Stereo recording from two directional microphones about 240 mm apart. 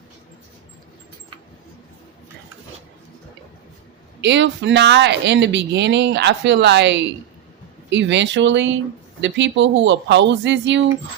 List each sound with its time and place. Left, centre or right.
4.2 s speech: right